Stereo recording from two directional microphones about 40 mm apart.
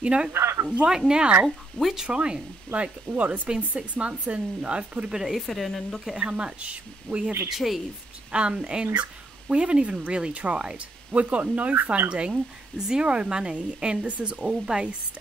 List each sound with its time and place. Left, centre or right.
0.0 s speech: right
1.8 s speech: centre
2.0 s speech: right
5.1 s speech: centre
5.5 s speech: centre
6.2 s speech: right
7.4 s speech: centre
8.3 s speech: right
11.7 s speech: right
12.1 s speech: right
12.7 s speech: centre
13.0 s speech: right